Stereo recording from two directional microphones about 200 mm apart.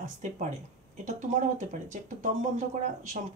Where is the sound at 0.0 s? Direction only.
35° right (ahead or behind).